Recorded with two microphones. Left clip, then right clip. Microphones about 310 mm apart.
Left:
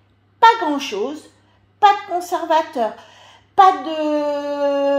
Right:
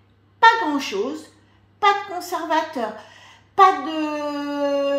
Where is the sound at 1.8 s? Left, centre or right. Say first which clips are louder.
Left 5 dB; left.